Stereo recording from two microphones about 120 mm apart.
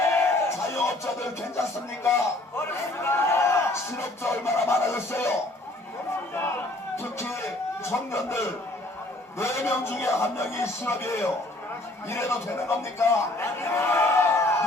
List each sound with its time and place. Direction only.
0.0 s music: 20° left (ahead or behind)
2.6 s a sound: 20° left (ahead or behind)
4.2 s a man's voice: 25° left (ahead or behind)
6.9 s a man's voice: 20° left (ahead or behind)